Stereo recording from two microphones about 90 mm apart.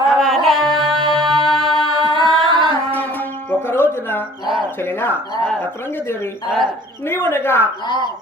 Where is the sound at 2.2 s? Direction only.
Centre (ahead or behind).